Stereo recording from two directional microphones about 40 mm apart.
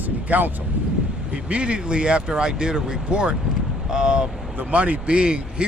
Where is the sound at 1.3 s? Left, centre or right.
Right.